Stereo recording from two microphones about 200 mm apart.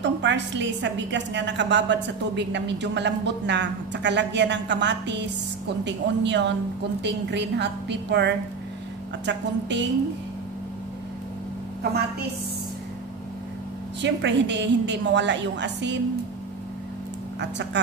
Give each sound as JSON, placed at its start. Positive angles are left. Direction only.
{"t": 0.0, "sound": "a woman's voice", "side_deg": -65}
{"t": 14.0, "sound": "a woman's voice", "side_deg": -60}